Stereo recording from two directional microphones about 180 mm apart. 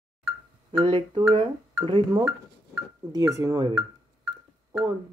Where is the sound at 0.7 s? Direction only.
30° right (ahead or behind).